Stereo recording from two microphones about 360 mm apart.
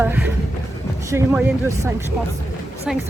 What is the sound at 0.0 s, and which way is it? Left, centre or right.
Speech, centre.